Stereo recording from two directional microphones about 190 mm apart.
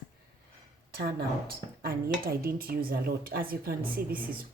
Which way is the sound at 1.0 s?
55° right (ahead or behind).